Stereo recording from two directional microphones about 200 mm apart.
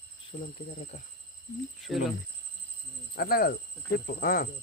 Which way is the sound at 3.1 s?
50° left (ahead or behind).